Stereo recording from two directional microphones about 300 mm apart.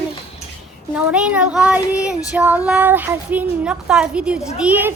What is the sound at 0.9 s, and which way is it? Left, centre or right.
Speech, centre.